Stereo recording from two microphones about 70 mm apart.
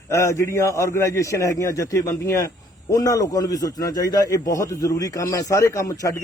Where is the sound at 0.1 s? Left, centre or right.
Left.